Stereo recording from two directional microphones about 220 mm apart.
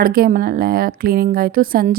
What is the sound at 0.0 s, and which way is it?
A woman's voice, 40° right (ahead or behind).